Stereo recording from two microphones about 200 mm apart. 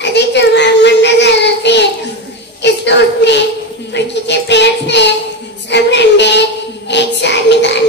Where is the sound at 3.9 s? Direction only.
60° left (ahead or behind).